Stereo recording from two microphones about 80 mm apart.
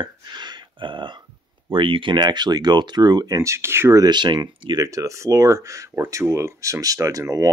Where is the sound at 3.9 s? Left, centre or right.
Right.